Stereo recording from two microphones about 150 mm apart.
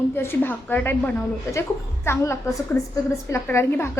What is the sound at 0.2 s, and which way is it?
A woman's voice, 15° left (ahead or behind).